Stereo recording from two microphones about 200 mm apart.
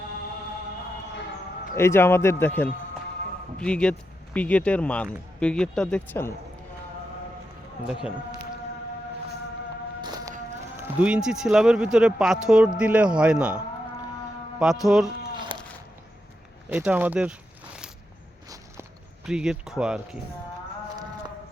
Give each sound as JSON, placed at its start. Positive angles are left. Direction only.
{"t": 1.7, "sound": "a man's voice", "side_deg": 10}
{"t": 10.0, "sound": "a sound", "side_deg": -20}
{"t": 10.8, "sound": "a man's voice", "side_deg": -10}
{"t": 14.6, "sound": "a man's voice", "side_deg": 0}
{"t": 16.6, "sound": "speech", "side_deg": -10}
{"t": 18.4, "sound": "walk", "side_deg": -15}
{"t": 19.2, "sound": "a man's voice", "side_deg": -5}